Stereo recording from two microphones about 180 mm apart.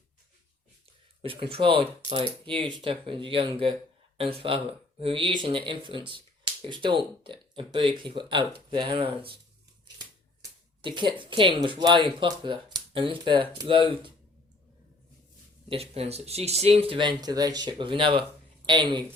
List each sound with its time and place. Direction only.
1.2 s speech: 30° right (ahead or behind)
10.8 s speech: 25° right (ahead or behind)
15.7 s speech: 35° right (ahead or behind)